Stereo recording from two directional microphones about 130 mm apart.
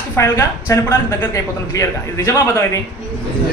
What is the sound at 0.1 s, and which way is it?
Speech, 20° left (ahead or behind).